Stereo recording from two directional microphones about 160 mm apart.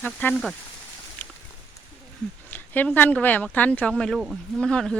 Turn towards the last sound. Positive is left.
turn(degrees=5)  # may be behind; listen again after turning